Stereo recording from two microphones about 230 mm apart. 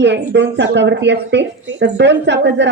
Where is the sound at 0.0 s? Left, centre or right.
Right.